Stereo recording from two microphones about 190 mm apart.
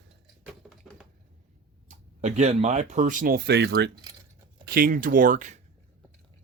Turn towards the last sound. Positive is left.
turn(degrees=-45)  # may be behind; listen again after turning